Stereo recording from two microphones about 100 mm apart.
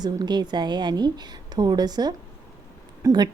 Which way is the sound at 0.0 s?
45° right (ahead or behind).